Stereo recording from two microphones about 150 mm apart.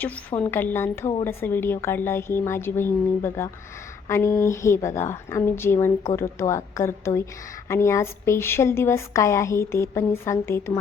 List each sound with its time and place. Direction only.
0.0 s a woman's voice: 10° left (ahead or behind)